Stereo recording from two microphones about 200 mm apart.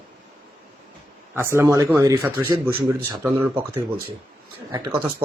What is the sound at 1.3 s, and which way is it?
Speech, 10° right (ahead or behind).